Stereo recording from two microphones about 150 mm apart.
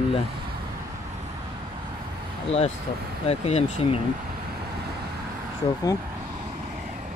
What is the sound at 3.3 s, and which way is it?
Speech, 45° left (ahead or behind).